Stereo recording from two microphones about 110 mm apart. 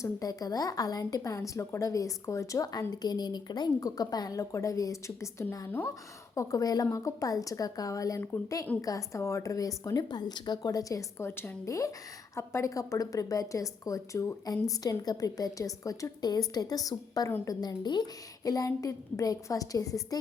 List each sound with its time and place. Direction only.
0.0 s a woman's voice: 35° left (ahead or behind)
11.3 s a woman's voice: 20° left (ahead or behind)